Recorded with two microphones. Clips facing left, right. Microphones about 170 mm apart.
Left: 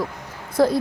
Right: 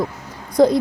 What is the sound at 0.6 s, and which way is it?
Speech, 20° right (ahead or behind).